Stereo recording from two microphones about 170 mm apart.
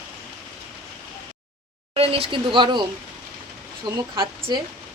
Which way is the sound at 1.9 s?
35° right (ahead or behind).